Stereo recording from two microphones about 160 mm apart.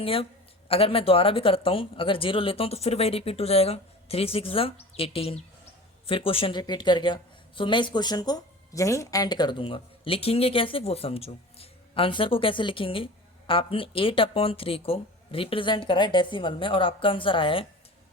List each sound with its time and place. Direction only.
0.0 s speech: 35° left (ahead or behind)